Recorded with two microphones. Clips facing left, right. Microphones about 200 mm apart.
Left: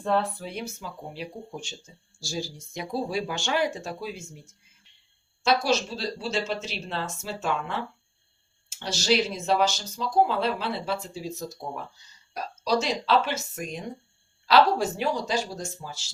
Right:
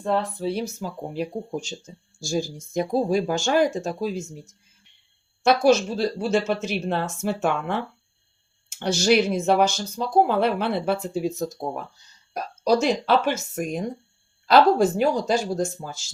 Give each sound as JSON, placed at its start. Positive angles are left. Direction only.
{"t": 0.0, "sound": "speech", "side_deg": -15}
{"t": 0.3, "sound": "speech", "side_deg": -35}
{"t": 5.4, "sound": "speech", "side_deg": -55}
{"t": 8.8, "sound": "speech", "side_deg": -55}